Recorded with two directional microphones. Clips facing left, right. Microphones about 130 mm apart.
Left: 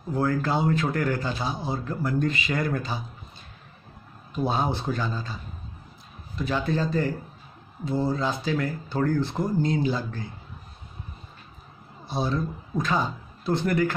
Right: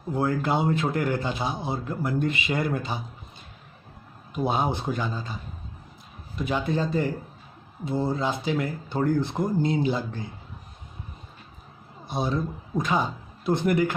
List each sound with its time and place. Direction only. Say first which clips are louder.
0.1 s speech: even; 20° right (ahead or behind)
4.3 s speech: even; 20° right (ahead or behind)
12.1 s speech: even; 20° right (ahead or behind)